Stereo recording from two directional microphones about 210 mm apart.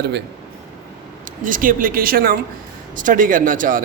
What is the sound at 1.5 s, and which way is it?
Speech, 40° right (ahead or behind).